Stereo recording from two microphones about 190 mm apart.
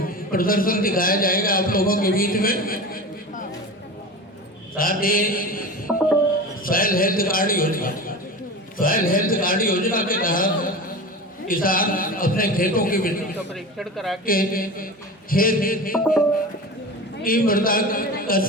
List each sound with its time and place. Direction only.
0.0 s a man's voice: 50° left (ahead or behind)
4.8 s a man's voice: 50° left (ahead or behind)
6.7 s a man's voice: 50° left (ahead or behind)
13.5 s speech: centre (ahead or behind)
14.3 s a man's voice: 50° left (ahead or behind)
17.2 s a man's voice: 50° left (ahead or behind)